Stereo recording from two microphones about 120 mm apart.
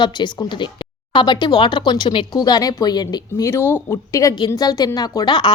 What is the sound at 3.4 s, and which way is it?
Speech, 20° left (ahead or behind).